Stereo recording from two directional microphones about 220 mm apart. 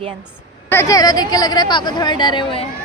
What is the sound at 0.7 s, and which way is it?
Speech, 15° left (ahead or behind).